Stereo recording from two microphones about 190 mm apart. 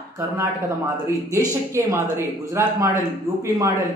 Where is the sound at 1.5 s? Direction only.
15° right (ahead or behind).